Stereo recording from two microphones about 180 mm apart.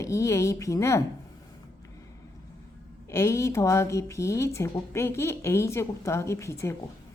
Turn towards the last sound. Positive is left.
turn(degrees=15)  # may be behind; listen again after turning